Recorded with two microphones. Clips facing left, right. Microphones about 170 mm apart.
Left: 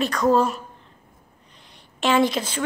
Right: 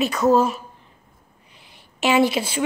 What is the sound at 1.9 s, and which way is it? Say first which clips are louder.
Speech: right 2 dB; 10° right (ahead or behind).